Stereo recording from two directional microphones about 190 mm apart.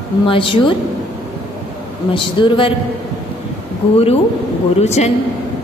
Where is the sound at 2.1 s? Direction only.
25° left (ahead or behind).